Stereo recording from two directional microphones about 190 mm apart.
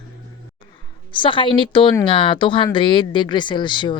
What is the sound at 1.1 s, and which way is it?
Speech, 25° left (ahead or behind).